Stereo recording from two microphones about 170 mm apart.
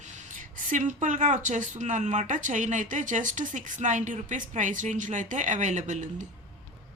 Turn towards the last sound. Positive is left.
turn(degrees=-45)  # may be behind; listen again after turning